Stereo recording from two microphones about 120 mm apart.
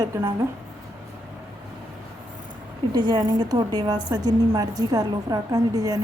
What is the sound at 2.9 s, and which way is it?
A woman's voice, 35° right (ahead or behind).